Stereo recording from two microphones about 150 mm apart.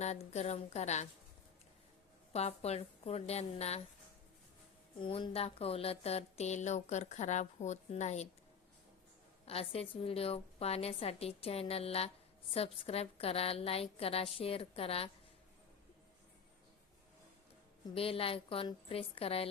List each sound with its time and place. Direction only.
0.0 s a woman's voice: 50° left (ahead or behind)
2.3 s a woman's voice: 45° left (ahead or behind)
4.9 s a woman's voice: 35° left (ahead or behind); by 8.3 s 50° left (ahead or behind)
9.5 s a woman's voice: 40° left (ahead or behind)
17.9 s a woman's voice: 40° left (ahead or behind)